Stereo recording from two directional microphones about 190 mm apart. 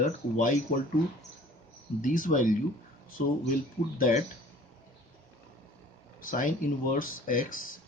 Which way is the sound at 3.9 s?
45° left (ahead or behind).